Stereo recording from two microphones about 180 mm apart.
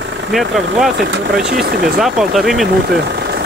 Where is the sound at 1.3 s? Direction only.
55° right (ahead or behind).